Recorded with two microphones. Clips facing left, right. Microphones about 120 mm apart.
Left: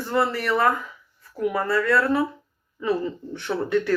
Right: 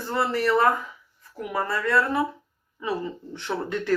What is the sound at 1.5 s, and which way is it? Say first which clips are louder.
Speech: left 1 dB; 20° right (ahead or behind).